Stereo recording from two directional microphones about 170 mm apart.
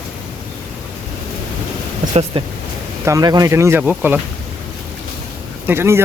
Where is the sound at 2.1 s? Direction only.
30° right (ahead or behind); by 4.2 s 10° right (ahead or behind).